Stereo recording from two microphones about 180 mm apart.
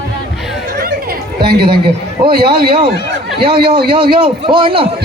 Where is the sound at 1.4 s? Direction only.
60° right (ahead or behind).